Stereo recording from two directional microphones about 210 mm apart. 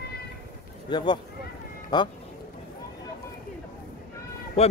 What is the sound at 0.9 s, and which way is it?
Speech, 20° left (ahead or behind).